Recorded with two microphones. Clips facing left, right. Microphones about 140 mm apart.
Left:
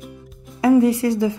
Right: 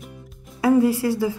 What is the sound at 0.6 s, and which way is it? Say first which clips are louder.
Speech: left 3 dB; 20° left (ahead or behind).